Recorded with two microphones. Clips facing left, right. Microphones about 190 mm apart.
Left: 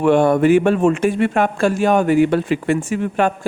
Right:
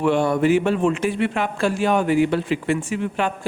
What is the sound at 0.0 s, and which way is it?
A man's voice, 50° left (ahead or behind).